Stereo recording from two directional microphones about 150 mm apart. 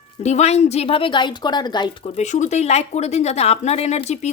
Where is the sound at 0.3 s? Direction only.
50° left (ahead or behind); by 1.9 s 30° left (ahead or behind).